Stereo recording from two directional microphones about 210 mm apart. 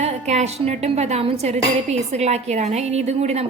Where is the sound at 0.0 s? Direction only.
30° right (ahead or behind).